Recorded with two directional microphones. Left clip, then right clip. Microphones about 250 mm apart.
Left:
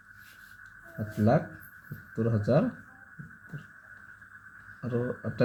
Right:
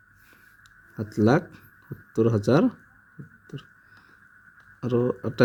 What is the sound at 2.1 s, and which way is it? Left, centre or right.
Speech, right.